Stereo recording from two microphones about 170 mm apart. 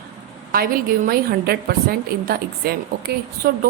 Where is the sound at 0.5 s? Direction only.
60° right (ahead or behind).